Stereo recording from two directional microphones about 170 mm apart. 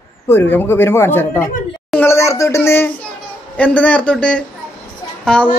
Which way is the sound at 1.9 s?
15° left (ahead or behind).